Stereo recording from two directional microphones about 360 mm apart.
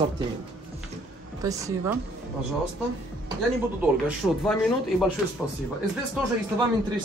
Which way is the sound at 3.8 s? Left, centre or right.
Centre.